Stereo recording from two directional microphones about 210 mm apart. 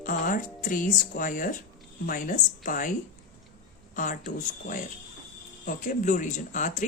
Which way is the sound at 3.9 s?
40° left (ahead or behind).